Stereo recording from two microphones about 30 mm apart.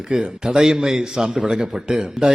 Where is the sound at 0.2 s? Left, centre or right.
Right.